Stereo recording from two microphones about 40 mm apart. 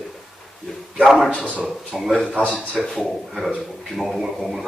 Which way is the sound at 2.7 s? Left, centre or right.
Left.